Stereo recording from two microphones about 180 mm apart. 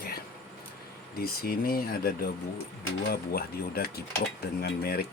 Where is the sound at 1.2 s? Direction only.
55° left (ahead or behind).